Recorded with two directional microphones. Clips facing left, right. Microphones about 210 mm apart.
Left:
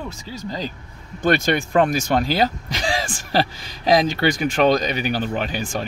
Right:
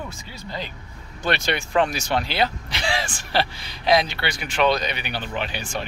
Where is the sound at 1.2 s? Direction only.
45° left (ahead or behind).